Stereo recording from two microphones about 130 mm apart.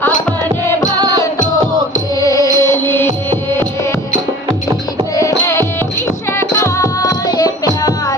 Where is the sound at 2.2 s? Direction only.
25° left (ahead or behind).